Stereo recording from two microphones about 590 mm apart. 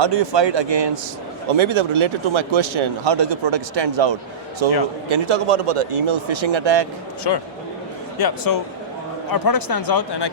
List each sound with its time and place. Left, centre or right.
0.0 s speech: right
7.3 s speech: left